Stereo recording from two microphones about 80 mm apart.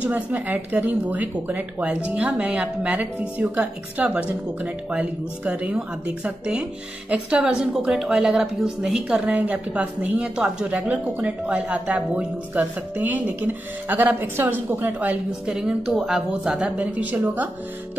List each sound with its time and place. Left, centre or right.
0.0 s a woman's voice: right
15.5 s a woman's voice: centre; by 17.5 s right